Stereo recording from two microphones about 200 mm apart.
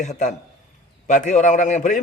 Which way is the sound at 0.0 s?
35° left (ahead or behind).